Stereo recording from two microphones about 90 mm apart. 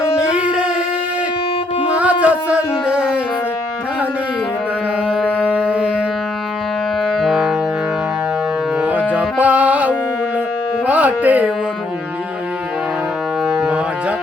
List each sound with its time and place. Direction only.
0.2 s music: 10° right (ahead or behind)
2.0 s a sound: 15° right (ahead or behind)
5.0 s a sound: 10° right (ahead or behind)
7.0 s music: centre (ahead or behind)
8.8 s music: 15° right (ahead or behind)
13.4 s music: 5° right (ahead or behind)